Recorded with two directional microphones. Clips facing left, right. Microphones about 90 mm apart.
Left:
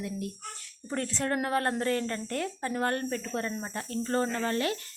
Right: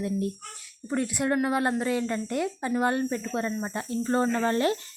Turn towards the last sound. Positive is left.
turn(degrees=-30)  # may be behind; listen again after turning